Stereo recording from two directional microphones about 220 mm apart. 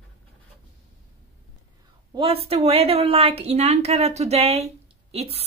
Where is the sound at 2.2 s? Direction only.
25° right (ahead or behind).